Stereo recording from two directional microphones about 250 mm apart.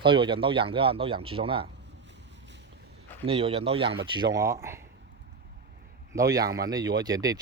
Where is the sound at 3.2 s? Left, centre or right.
Right.